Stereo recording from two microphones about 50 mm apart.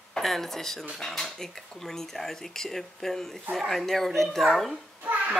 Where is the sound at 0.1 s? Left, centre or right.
Centre.